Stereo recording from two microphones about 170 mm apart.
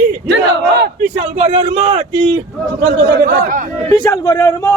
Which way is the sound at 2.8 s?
80° right.